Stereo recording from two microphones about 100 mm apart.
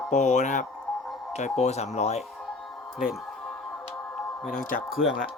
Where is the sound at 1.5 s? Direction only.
90° left.